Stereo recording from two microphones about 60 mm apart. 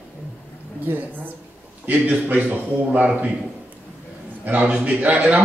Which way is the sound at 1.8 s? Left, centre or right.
Right.